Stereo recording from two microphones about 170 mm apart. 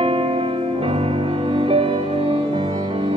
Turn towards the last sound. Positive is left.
turn(degrees=-30)  # may be behind; listen again after turning